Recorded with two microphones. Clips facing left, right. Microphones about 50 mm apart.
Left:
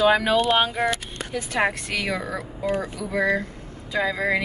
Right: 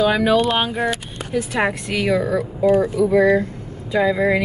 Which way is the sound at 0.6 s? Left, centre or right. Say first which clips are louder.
Right 1 dB; centre.